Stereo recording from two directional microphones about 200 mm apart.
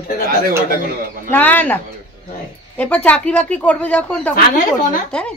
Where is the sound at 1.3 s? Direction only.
10° left (ahead or behind).